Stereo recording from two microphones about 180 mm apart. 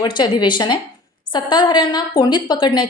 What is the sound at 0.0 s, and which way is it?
A woman's voice, 25° left (ahead or behind).